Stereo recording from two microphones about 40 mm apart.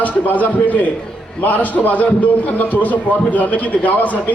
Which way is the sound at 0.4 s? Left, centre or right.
Left.